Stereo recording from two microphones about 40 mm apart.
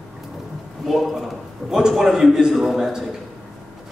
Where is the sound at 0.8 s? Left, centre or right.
Centre.